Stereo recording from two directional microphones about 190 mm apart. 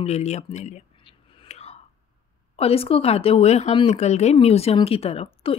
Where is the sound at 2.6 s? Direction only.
30° left (ahead or behind).